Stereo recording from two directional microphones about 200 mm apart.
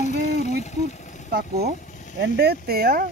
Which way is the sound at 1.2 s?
50° right (ahead or behind).